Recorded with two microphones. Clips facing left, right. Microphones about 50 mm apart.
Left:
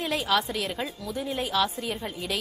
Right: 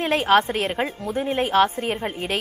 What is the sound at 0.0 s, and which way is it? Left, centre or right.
A woman's voice, right.